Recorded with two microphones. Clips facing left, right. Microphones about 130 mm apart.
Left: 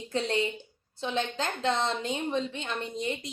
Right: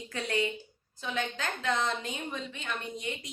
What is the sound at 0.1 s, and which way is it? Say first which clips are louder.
A woman's voice: left 3 dB; 30° left (ahead or behind).